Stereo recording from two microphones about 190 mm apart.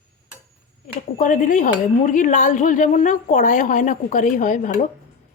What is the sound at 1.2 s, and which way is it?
A woman's voice, 45° left (ahead or behind).